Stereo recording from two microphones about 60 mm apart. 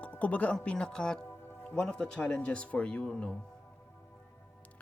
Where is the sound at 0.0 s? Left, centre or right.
Left.